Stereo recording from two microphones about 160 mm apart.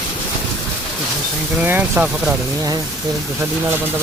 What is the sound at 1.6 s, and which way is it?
Speech, 10° right (ahead or behind).